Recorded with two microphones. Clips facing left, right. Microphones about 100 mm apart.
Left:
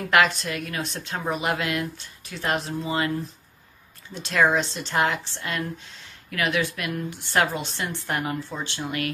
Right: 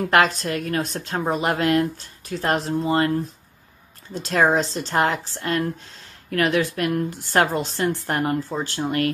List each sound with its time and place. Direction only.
0.1 s a woman's voice: 40° right (ahead or behind)
4.1 s a woman's voice: 40° right (ahead or behind)